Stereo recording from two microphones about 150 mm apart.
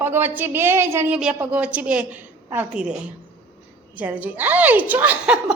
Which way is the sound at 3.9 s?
10° right (ahead or behind).